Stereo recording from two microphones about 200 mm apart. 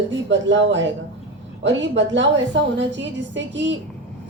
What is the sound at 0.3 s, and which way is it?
A woman's voice, 65° right (ahead or behind).